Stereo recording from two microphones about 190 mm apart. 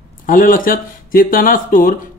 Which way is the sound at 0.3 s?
45° left (ahead or behind).